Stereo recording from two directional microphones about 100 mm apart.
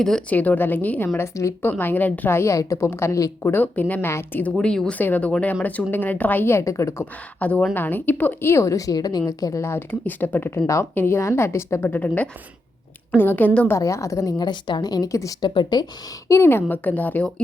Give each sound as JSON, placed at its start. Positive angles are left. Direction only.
{"t": 0.0, "sound": "speech", "side_deg": 5}
{"t": 0.3, "sound": "speech", "side_deg": 20}
{"t": 3.5, "sound": "speech", "side_deg": 15}
{"t": 4.5, "sound": "speech", "side_deg": 5}
{"t": 7.0, "sound": "speech", "side_deg": 15}
{"t": 13.7, "sound": "a woman's voice", "side_deg": 30}
{"t": 15.4, "sound": "speech", "side_deg": 50}
{"t": 16.3, "sound": "speech", "side_deg": 25}